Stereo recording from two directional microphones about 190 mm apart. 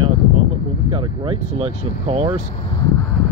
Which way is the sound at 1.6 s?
30° right (ahead or behind).